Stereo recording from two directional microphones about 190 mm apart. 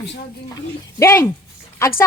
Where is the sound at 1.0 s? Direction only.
15° left (ahead or behind).